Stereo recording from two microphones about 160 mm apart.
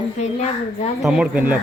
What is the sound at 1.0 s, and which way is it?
Speech, 5° right (ahead or behind).